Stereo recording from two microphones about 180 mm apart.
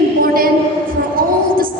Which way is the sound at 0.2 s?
55° right (ahead or behind).